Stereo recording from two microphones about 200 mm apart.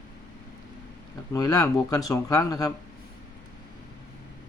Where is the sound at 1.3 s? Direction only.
15° left (ahead or behind).